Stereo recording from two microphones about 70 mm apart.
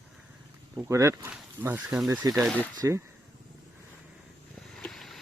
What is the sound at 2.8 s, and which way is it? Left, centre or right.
Speech, right.